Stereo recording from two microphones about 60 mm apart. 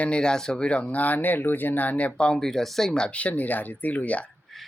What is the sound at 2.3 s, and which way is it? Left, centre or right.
Speech, centre.